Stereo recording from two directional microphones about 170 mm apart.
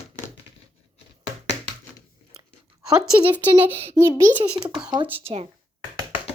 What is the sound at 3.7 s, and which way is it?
Speech, 35° right (ahead or behind).